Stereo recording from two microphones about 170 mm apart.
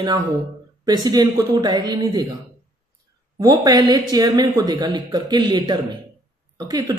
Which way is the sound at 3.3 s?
25° right (ahead or behind).